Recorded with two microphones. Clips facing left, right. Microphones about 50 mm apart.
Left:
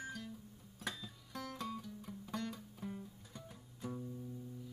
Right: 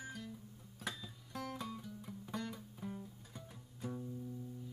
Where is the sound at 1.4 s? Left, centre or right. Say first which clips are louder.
Even; centre.